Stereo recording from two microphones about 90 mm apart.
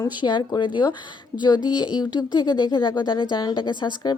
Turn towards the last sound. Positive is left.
turn(degrees=55)  # may be behind; listen again after turning